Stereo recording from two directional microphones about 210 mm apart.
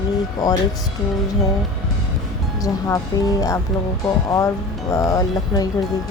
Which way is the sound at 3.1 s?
15° left (ahead or behind).